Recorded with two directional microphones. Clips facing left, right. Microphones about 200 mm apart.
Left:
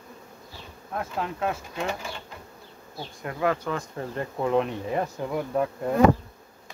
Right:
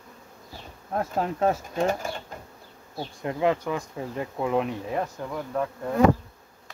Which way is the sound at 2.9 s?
25° right (ahead or behind).